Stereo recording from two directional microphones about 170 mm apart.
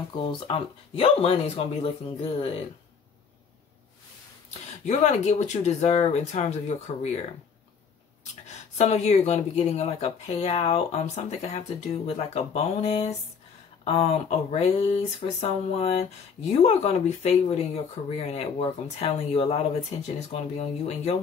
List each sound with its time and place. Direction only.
0.1 s speech: 30° left (ahead or behind)
4.8 s speech: 40° left (ahead or behind)
8.7 s speech: 40° left (ahead or behind)